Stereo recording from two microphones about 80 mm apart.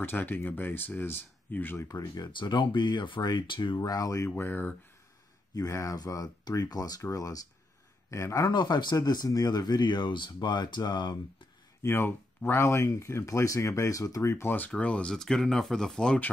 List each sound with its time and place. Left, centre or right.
0.0 s speech: left
1.8 s speech: left
3.7 s speech: left
4.4 s speech: left
5.5 s speech: left
8.5 s speech: left
8.9 s speech: left
11.8 s speech: left
14.3 s speech: left
14.8 s speech: centre